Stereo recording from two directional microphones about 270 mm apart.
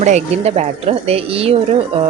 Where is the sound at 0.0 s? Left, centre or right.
Right.